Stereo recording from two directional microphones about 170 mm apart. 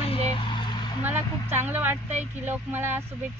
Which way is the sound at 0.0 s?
30° left (ahead or behind).